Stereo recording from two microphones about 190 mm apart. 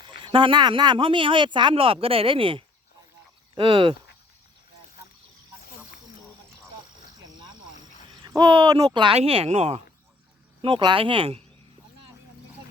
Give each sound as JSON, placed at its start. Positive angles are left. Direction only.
{"t": 0.2, "sound": "speech", "side_deg": -25}
{"t": 8.2, "sound": "speech", "side_deg": -20}
{"t": 10.6, "sound": "speech", "side_deg": -25}